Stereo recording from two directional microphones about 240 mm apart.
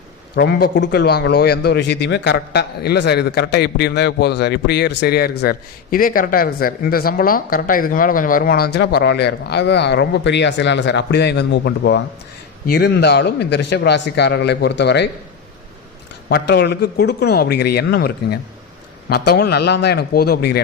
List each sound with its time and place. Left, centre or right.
0.3 s speech: left
16.3 s speech: left